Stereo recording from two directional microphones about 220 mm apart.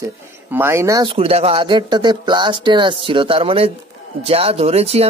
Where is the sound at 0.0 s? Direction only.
10° right (ahead or behind).